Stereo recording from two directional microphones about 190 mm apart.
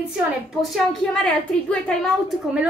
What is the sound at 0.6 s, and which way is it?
A woman's voice, centre (ahead or behind).